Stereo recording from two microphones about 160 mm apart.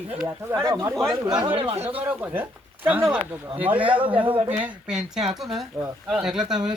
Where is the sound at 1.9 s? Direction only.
10° right (ahead or behind).